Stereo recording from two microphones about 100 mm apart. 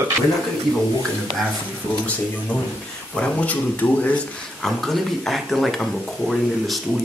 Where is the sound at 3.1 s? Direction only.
10° left (ahead or behind).